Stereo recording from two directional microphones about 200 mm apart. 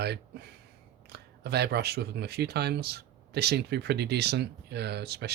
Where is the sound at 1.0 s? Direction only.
55° right (ahead or behind).